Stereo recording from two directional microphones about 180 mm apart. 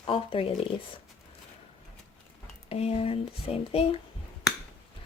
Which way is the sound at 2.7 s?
35° left (ahead or behind).